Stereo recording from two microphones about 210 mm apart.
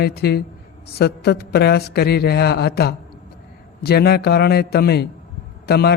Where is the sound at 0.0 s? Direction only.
50° left (ahead or behind).